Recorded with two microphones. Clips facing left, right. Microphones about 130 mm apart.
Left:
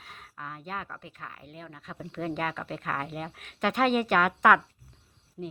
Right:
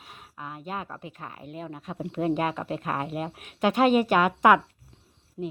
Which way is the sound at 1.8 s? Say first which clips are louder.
Right 7 dB; 30° right (ahead or behind).